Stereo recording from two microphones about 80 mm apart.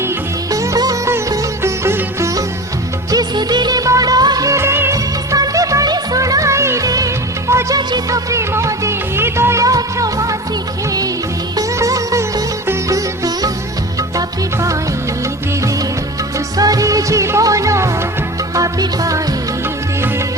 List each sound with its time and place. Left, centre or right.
0.5 s music: right
3.1 s music: right
4.4 s music: right
5.3 s music: right
11.5 s music: right
16.6 s music: right